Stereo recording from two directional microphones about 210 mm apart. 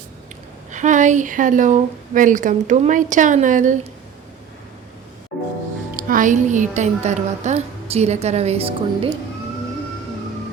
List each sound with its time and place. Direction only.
0.7 s a woman's voice: 35° right (ahead or behind)
6.0 s a woman's voice: 40° right (ahead or behind)